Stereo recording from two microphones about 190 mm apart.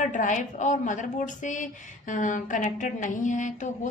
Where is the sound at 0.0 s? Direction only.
40° left (ahead or behind).